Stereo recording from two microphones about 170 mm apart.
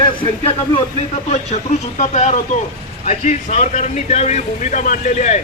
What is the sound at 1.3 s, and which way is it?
Speech, 40° left (ahead or behind).